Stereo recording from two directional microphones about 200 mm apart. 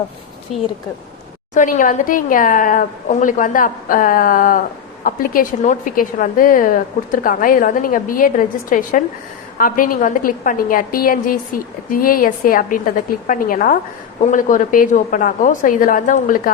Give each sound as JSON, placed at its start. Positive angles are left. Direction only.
{"t": 1.5, "sound": "a woman's voice", "side_deg": 40}